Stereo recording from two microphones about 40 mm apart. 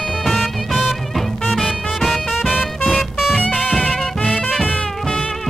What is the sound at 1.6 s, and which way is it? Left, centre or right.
Music, centre.